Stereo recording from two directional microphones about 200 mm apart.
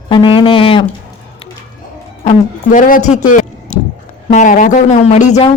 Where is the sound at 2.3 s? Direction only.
40° left (ahead or behind).